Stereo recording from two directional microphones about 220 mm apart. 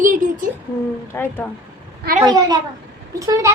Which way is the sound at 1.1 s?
10° left (ahead or behind).